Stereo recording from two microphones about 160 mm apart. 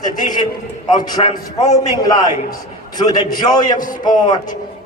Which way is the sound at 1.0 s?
25° left (ahead or behind).